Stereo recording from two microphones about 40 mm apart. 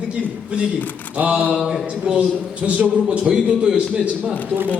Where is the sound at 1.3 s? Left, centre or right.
Right.